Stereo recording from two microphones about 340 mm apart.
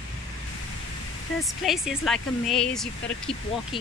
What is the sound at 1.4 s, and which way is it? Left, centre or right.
Speech, centre.